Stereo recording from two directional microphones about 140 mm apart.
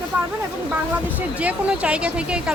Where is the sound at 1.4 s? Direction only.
10° right (ahead or behind).